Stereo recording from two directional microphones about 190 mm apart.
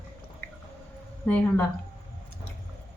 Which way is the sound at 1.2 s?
10° left (ahead or behind).